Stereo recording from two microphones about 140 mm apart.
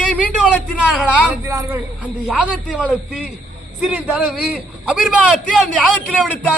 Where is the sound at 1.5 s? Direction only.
20° right (ahead or behind).